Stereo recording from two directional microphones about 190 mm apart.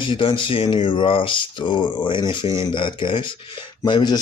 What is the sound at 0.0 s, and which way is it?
Speech, 25° left (ahead or behind).